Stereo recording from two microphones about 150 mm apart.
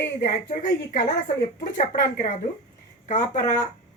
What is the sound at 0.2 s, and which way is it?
Speech, 65° left (ahead or behind).